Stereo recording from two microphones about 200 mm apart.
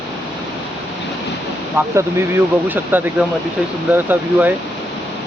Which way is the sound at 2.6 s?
10° right (ahead or behind).